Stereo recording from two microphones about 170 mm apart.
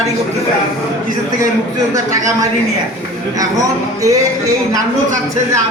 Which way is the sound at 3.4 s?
20° right (ahead or behind).